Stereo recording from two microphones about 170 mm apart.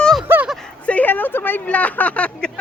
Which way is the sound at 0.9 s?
10° left (ahead or behind).